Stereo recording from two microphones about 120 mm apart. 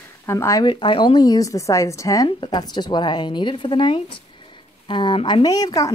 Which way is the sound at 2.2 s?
40° left (ahead or behind).